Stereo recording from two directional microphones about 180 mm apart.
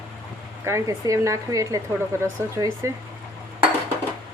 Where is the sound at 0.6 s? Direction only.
15° right (ahead or behind).